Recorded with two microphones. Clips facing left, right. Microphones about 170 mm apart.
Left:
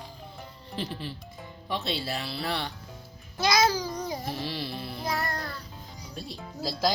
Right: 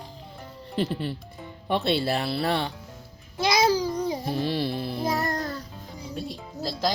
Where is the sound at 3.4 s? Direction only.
30° right (ahead or behind).